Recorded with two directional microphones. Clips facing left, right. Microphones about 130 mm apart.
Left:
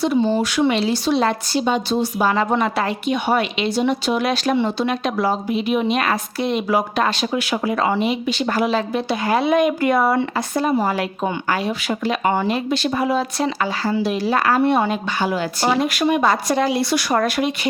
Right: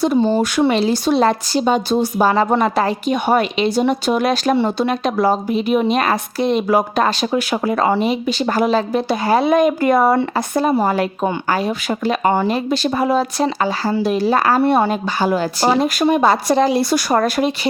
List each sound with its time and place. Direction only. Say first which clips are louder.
0.0 s speech: right 3 dB; 40° right (ahead or behind)